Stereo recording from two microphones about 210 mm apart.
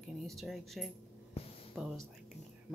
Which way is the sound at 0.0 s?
Centre (ahead or behind).